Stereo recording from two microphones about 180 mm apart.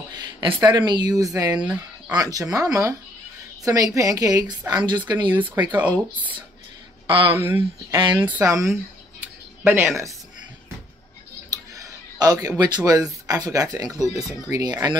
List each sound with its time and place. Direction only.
0.1 s speech: 25° right (ahead or behind)
1.6 s speech: 5° right (ahead or behind)
2.1 s a woman's voice: 20° right (ahead or behind)
7.1 s speech: 30° right (ahead or behind)
7.3 s speech: 15° right (ahead or behind)
9.6 s a sound: 10° right (ahead or behind)
11.5 s a woman's voice: 20° right (ahead or behind)